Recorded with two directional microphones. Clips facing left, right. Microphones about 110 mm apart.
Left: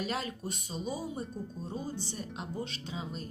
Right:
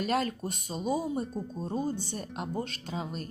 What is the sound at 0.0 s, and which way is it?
Speech, 50° right (ahead or behind).